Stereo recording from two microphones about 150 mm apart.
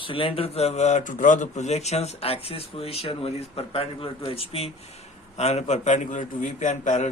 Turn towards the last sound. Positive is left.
turn(degrees=55)  # may be behind; listen again after turning